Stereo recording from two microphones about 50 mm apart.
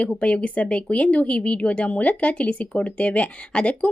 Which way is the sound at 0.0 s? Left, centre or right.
Left.